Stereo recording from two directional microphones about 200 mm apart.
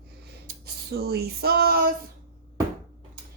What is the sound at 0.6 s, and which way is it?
A woman's voice, 55° right (ahead or behind).